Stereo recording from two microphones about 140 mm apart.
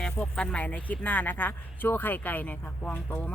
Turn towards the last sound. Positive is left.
turn(degrees=10)  # may be behind; listen again after turning